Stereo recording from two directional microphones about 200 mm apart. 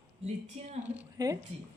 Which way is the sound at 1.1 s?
20° right (ahead or behind).